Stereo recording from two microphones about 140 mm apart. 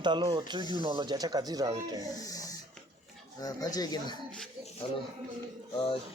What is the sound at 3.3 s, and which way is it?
Speech, 25° left (ahead or behind).